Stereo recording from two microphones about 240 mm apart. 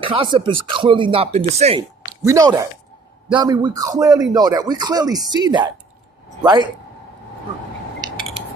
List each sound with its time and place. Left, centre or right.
0.0 s speech: right
2.2 s speech: centre